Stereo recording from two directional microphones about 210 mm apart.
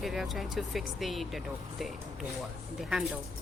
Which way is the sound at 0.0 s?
Centre (ahead or behind).